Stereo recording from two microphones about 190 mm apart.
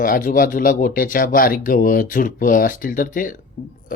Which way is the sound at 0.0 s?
45° left (ahead or behind).